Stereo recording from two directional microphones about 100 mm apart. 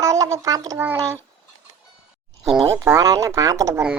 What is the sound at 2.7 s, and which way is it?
A child's voice, 30° right (ahead or behind).